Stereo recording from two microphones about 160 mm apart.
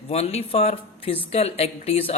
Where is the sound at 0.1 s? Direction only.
40° left (ahead or behind).